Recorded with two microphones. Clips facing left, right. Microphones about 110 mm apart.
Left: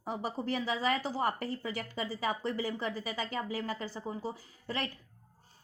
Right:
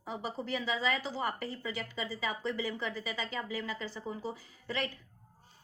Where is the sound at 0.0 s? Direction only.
45° left (ahead or behind).